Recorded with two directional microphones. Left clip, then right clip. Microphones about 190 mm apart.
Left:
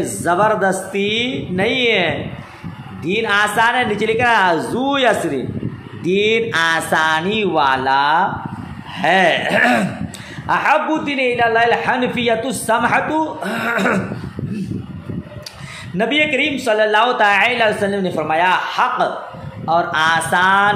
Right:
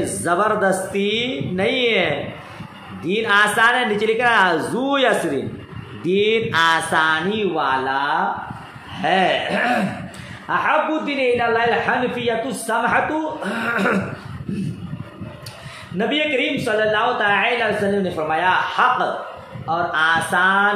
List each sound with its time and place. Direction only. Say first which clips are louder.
0.2 s a man's voice: left 3 dB; 25° left (ahead or behind)
16.0 s a man's voice: left 4 dB; 35° left (ahead or behind)